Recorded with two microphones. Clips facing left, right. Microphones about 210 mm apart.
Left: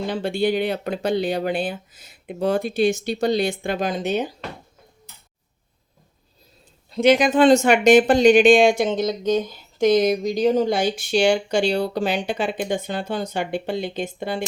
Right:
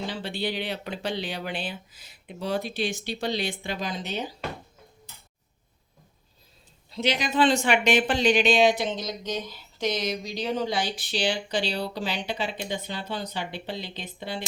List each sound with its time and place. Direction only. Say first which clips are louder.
0.1 s speech: left 9 dB; 50° left (ahead or behind)
6.9 s speech: left 10 dB; 50° left (ahead or behind)